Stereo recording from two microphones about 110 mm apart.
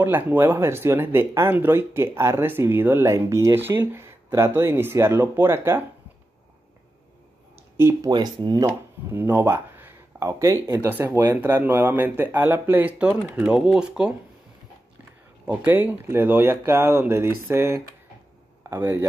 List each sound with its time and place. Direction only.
0.0 s speech: 15° right (ahead or behind)
7.7 s speech: 20° right (ahead or behind)
8.1 s speech: 40° right (ahead or behind)
8.6 s speech: 20° right (ahead or behind)
15.4 s speech: 15° right (ahead or behind)